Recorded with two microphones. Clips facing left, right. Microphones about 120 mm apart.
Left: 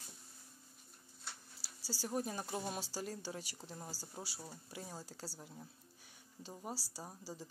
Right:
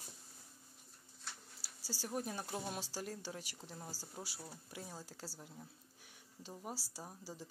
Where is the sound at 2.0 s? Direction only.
Centre (ahead or behind).